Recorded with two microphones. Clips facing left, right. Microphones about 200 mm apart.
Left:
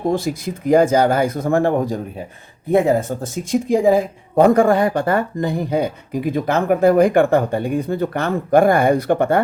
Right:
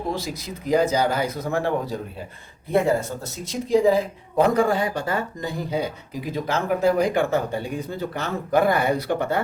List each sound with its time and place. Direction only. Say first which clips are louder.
0.1 s speech: left 8 dB; 50° left (ahead or behind)